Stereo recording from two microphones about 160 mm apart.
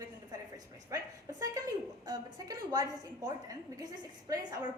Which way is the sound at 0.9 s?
20° right (ahead or behind).